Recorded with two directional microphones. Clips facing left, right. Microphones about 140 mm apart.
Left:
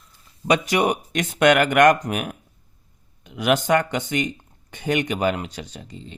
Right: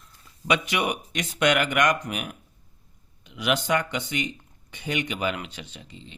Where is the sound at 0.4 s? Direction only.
40° left (ahead or behind).